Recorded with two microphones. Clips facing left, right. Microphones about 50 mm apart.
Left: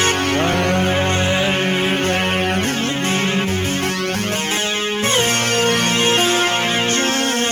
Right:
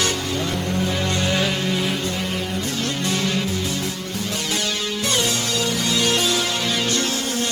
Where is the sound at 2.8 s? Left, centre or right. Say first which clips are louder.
Left 4 dB; left.